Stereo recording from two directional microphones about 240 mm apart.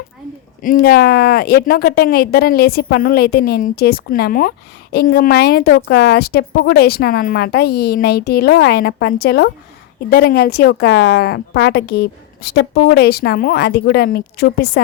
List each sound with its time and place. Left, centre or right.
0.6 s speech: left